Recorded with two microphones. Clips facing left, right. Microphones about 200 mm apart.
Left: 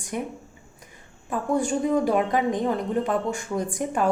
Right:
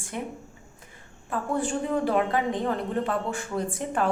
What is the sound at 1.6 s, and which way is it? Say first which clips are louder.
Speech: left 4 dB; 15° left (ahead or behind).